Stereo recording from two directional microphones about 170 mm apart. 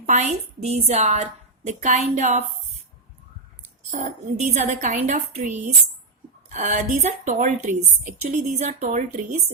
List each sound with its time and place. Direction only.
0.0 s a woman's voice: 40° right (ahead or behind)
3.8 s a woman's voice: 45° right (ahead or behind)